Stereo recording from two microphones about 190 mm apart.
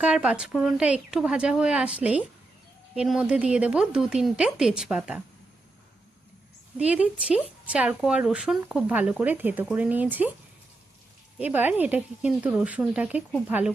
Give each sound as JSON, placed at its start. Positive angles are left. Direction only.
{"t": 0.0, "sound": "speech", "side_deg": -5}
{"t": 6.7, "sound": "a woman's voice", "side_deg": -5}
{"t": 11.3, "sound": "a woman's voice", "side_deg": -10}